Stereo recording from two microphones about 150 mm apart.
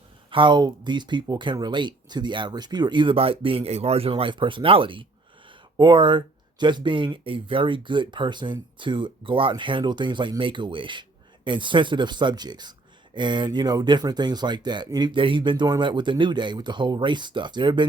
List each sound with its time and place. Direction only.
0.3 s speech: 35° right (ahead or behind)